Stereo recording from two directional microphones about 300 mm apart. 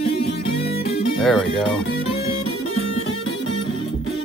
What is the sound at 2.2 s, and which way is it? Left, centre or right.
Music, left.